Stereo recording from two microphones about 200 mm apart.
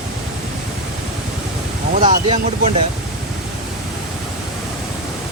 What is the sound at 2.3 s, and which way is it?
Speech, 30° right (ahead or behind).